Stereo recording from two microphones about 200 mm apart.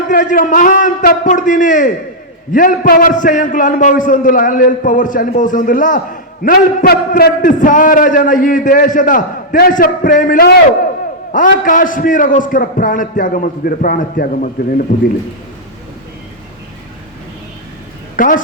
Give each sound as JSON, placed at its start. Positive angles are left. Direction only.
{"t": 0.1, "sound": "a man's voice", "side_deg": 45}
{"t": 18.2, "sound": "a woman's voice", "side_deg": 40}